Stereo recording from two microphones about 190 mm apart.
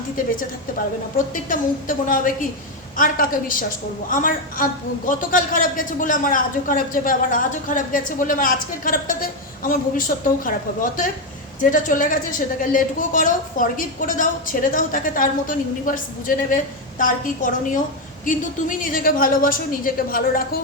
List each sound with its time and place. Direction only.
1.3 s a woman's voice: 45° left (ahead or behind)
10.2 s a woman's voice: 45° left (ahead or behind)